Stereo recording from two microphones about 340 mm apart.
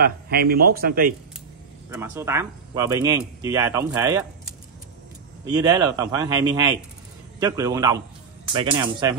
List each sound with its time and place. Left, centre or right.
0.0 s a man's voice: right
1.9 s speech: centre
5.5 s speech: centre